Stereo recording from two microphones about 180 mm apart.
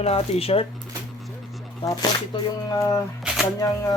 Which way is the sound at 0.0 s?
35° left (ahead or behind).